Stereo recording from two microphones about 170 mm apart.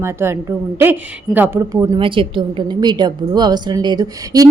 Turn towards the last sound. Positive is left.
turn(degrees=-20)  # may be behind; listen again after turning